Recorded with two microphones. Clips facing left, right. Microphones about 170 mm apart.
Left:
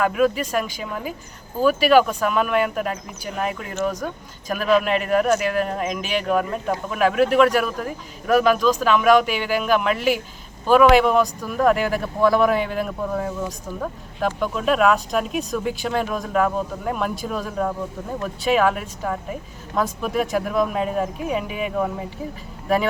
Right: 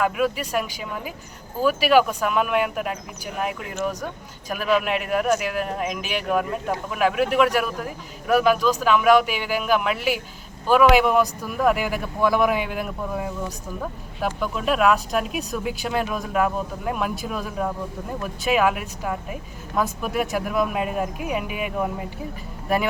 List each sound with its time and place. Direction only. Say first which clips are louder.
0.0 s speech: left 3 dB; 5° right (ahead or behind)